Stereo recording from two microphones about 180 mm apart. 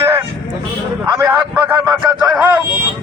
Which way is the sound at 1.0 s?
25° right (ahead or behind).